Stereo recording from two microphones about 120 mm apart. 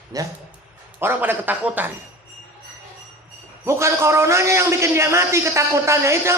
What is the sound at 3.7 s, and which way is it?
A man's voice, 20° right (ahead or behind).